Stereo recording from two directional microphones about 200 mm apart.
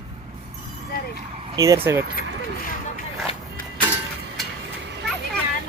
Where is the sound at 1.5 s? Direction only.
15° right (ahead or behind).